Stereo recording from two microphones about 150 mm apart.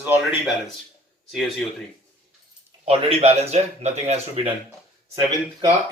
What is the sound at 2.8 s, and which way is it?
Speech, 40° right (ahead or behind).